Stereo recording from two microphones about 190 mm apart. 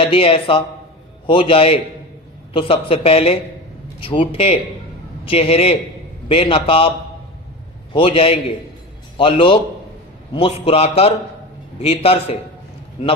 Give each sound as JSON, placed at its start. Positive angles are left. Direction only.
{"t": 0.0, "sound": "a man's voice", "side_deg": 30}
{"t": 7.9, "sound": "a man's voice", "side_deg": 30}